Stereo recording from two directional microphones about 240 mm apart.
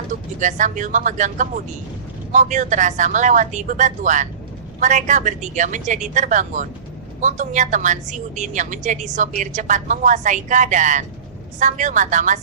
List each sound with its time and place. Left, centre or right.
0.3 s a woman's voice: right